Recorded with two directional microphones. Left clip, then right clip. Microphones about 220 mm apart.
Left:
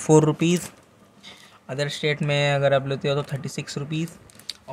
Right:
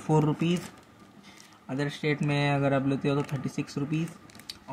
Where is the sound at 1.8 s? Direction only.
50° left (ahead or behind).